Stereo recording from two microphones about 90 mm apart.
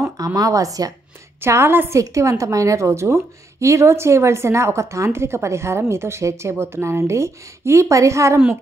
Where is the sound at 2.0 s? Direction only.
35° right (ahead or behind).